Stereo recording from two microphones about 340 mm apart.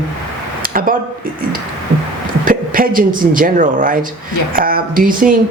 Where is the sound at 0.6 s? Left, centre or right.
Right.